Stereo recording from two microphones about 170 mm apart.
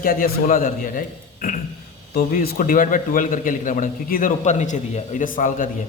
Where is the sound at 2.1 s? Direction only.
60° left (ahead or behind).